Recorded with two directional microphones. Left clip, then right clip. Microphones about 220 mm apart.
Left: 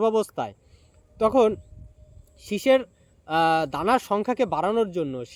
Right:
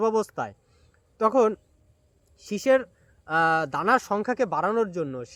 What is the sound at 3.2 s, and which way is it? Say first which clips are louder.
Speech: left 1 dB; centre (ahead or behind).